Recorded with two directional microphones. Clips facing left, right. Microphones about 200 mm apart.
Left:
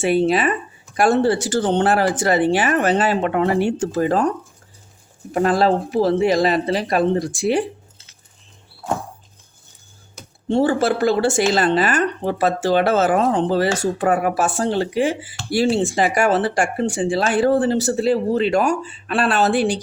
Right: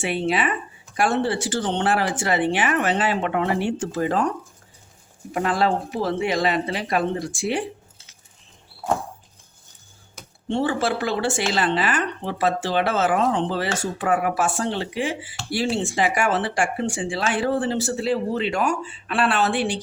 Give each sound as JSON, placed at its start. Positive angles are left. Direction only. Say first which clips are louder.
{"t": 0.0, "sound": "speech", "louder": "left 6 dB", "side_deg": 40}
{"t": 5.3, "sound": "speech", "louder": "left 5 dB", "side_deg": 40}
{"t": 10.5, "sound": "speech", "louder": "left 5 dB", "side_deg": 40}